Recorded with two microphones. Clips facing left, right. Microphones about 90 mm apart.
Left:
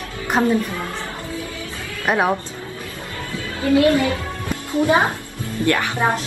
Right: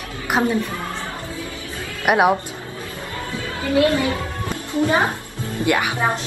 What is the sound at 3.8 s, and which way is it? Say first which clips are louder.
Speech: left 1 dB; 25° right (ahead or behind).